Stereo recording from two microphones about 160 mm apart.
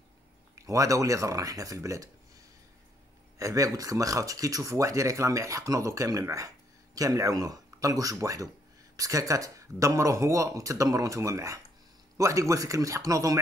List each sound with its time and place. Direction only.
0.6 s speech: 20° right (ahead or behind)
3.3 s speech: 20° right (ahead or behind)